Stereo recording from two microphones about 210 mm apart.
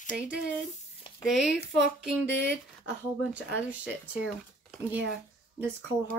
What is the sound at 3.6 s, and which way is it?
Speech, 5° right (ahead or behind).